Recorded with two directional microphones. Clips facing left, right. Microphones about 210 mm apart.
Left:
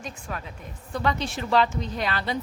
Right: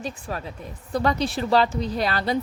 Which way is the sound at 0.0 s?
35° right (ahead or behind).